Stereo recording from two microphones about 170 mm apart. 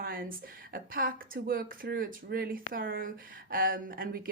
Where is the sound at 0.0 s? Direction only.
60° right (ahead or behind).